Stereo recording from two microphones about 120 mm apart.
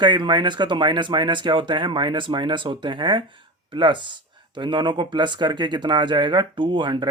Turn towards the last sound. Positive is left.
turn(degrees=-40)  # may be behind; listen again after turning